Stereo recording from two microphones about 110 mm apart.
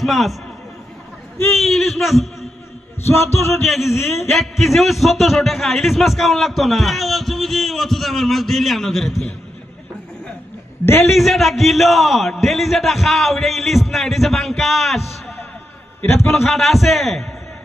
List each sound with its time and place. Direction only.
0.0 s a man's voice: centre (ahead or behind)
1.5 s a man's voice: centre (ahead or behind)
3.3 s music: 25° left (ahead or behind)
3.7 s a man's voice: centre (ahead or behind)
10.8 s music: 20° left (ahead or behind)
11.1 s a man's voice: centre (ahead or behind)
16.0 s a man's voice: 20° left (ahead or behind)
16.3 s a man's voice: centre (ahead or behind)